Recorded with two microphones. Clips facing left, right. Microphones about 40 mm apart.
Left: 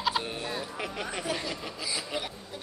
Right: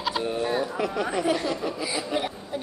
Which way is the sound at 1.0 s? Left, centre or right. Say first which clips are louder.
Right 7 dB; right.